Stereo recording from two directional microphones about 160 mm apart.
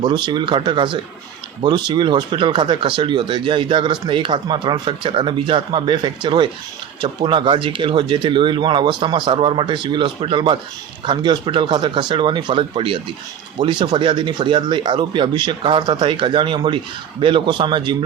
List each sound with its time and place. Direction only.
0.0 s speech: 30° right (ahead or behind)